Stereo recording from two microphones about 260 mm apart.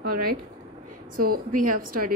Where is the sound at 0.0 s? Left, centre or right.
Right.